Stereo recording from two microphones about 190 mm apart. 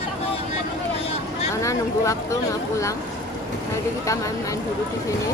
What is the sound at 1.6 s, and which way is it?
Speech, 15° left (ahead or behind).